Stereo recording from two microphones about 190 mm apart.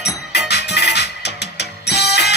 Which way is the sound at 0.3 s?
60° left (ahead or behind).